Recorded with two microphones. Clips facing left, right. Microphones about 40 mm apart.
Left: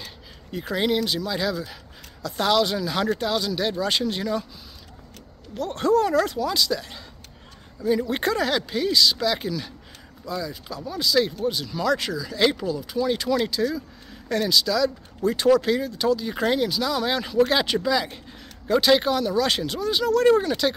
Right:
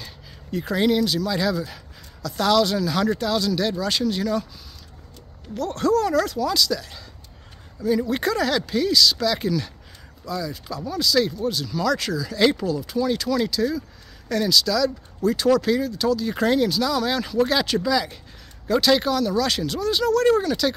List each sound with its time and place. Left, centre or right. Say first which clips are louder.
0.0 s speech: even; centre
2.2 s speech: right 2 dB; centre
5.6 s speech: even; left
8.1 s speech: right 1 dB; left
8.4 s speech: right 2 dB; centre
13.2 s speech: right 1 dB; left